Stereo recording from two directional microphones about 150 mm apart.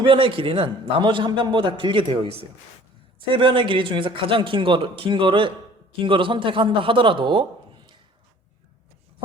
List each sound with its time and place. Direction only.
0.0 s a man's voice: 35° right (ahead or behind)